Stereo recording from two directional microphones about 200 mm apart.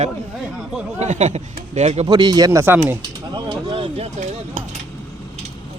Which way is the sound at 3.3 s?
20° right (ahead or behind).